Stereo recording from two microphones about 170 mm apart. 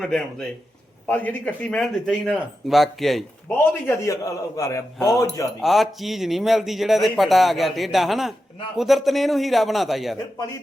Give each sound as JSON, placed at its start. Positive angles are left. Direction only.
{"t": 0.0, "sound": "speech", "side_deg": 5}
{"t": 3.5, "sound": "a man's voice", "side_deg": 15}
{"t": 5.5, "sound": "speech", "side_deg": 0}